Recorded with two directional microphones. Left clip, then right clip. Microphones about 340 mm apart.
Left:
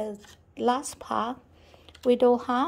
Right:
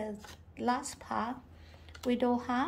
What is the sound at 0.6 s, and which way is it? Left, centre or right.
Speech, centre.